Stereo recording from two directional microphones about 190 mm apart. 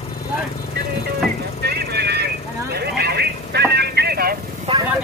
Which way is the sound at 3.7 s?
60° right (ahead or behind).